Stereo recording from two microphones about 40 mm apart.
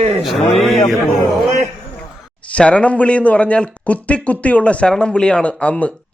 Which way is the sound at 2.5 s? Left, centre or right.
Left.